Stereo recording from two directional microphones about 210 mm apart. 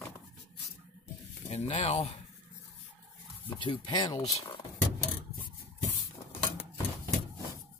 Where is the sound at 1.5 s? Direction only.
30° left (ahead or behind).